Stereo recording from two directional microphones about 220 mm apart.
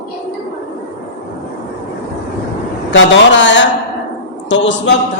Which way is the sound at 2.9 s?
55° left (ahead or behind).